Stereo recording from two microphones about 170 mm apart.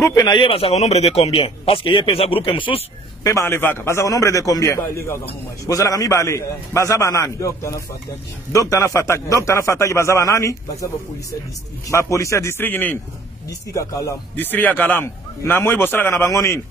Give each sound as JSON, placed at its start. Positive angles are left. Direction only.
{"t": 0.0, "sound": "a man's voice", "side_deg": 25}
{"t": 3.3, "sound": "speech", "side_deg": 15}
{"t": 11.9, "sound": "speech", "side_deg": 15}